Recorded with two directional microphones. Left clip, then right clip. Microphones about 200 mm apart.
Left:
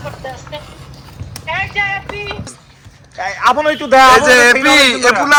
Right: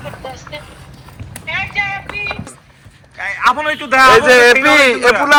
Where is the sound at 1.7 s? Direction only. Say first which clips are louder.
Left 2 dB; 15° left (ahead or behind).